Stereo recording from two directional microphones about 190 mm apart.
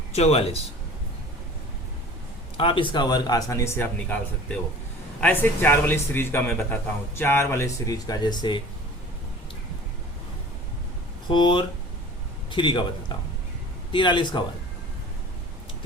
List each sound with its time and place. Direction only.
0.1 s a man's voice: 35° left (ahead or behind)
2.6 s speech: 25° left (ahead or behind)
5.2 s a man's voice: 10° left (ahead or behind)
11.3 s speech: 25° left (ahead or behind)
13.9 s speech: 25° left (ahead or behind)